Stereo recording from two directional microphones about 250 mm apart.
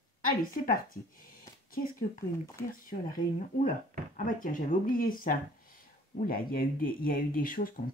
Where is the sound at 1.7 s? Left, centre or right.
Left.